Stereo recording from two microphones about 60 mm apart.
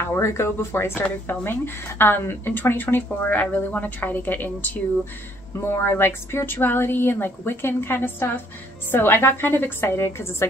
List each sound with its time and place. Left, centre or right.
0.0 s a woman's voice: left